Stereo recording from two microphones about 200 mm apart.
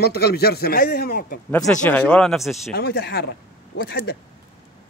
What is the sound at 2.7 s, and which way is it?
Speech, 50° left (ahead or behind).